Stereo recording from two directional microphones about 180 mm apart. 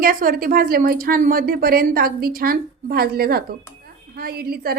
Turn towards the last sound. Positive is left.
turn(degrees=-60)  # may be behind; listen again after turning